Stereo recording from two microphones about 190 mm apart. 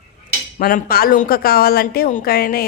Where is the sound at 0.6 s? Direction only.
50° left (ahead or behind).